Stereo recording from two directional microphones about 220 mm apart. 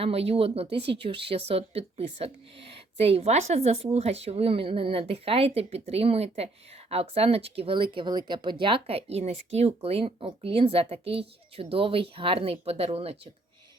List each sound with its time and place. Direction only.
0.0 s speech: 25° right (ahead or behind)